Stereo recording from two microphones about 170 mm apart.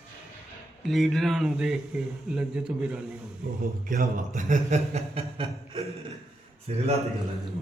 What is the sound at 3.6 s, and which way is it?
A man's voice, 50° right (ahead or behind).